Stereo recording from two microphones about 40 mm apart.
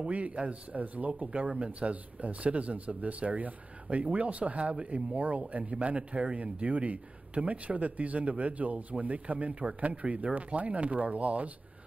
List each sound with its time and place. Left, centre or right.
0.0 s speech: right